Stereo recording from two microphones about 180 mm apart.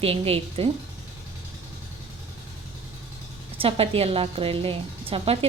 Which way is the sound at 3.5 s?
30° right (ahead or behind).